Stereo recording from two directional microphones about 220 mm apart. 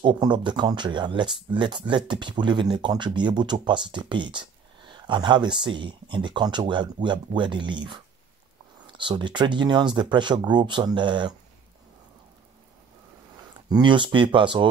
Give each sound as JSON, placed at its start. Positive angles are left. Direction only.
{"t": 0.0, "sound": "speech", "side_deg": -20}
{"t": 13.7, "sound": "speech", "side_deg": -20}